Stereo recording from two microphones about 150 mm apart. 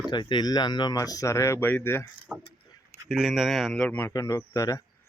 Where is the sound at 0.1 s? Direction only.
30° left (ahead or behind).